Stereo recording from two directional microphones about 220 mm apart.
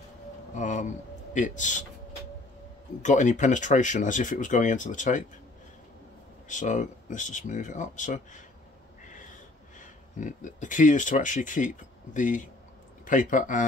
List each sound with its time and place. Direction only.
0.6 s a sound: 35° left (ahead or behind)
1.3 s speech: 35° left (ahead or behind)
3.0 s speech: 35° left (ahead or behind)
6.5 s speech: 35° left (ahead or behind)
9.8 s speech: 35° left (ahead or behind)